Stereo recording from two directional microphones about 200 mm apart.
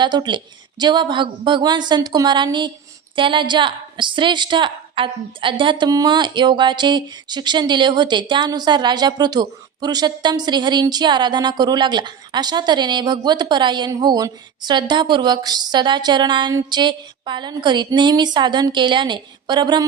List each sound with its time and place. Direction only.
0.0 s a woman's voice: 20° right (ahead or behind)